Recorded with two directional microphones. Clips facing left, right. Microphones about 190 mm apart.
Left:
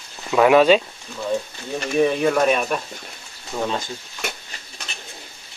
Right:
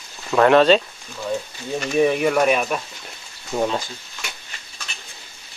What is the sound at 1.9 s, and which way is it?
Speech, 10° right (ahead or behind).